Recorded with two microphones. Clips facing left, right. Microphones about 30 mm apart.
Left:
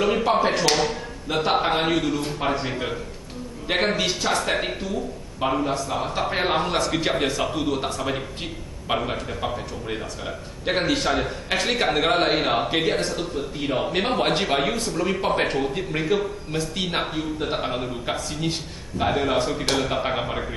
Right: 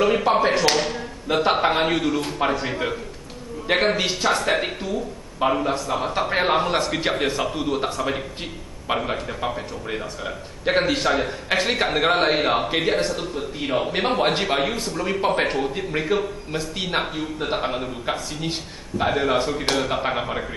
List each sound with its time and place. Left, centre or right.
0.0 s a man's voice: centre
2.1 s speech: right
2.6 s a man's voice: centre